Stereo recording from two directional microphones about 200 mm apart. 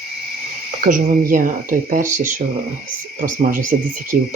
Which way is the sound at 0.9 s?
40° right (ahead or behind).